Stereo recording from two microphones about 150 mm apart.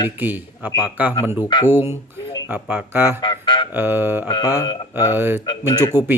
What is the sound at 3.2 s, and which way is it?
Speech, 30° left (ahead or behind).